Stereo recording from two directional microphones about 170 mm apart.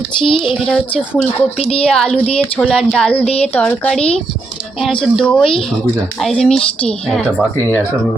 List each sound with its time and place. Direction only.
0.3 s speech: 30° left (ahead or behind)
0.6 s a woman's voice: centre (ahead or behind)
1.1 s a woman's voice: 10° left (ahead or behind)
5.1 s a woman's voice: 5° left (ahead or behind)